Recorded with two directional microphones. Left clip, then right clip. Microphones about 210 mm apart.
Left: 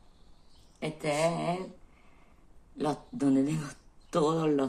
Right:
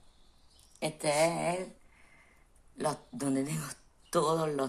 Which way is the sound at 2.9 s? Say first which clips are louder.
Left 5 dB; 30° right (ahead or behind).